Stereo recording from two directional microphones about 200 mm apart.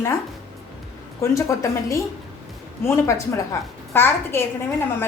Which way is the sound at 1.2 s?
15° left (ahead or behind).